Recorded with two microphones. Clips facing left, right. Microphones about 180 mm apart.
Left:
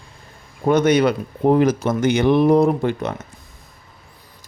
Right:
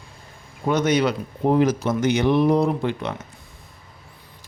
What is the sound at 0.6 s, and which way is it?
Speech, 55° left (ahead or behind).